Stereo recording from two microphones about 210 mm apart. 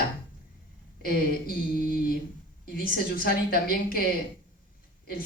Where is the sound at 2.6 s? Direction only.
45° left (ahead or behind).